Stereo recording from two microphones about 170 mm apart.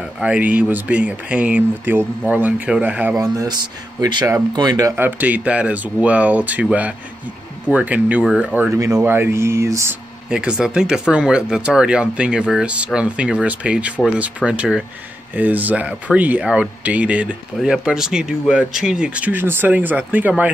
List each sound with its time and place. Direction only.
0.2 s speech: 10° right (ahead or behind)
3.2 s speech: 20° right (ahead or behind)
10.3 s speech: 5° right (ahead or behind)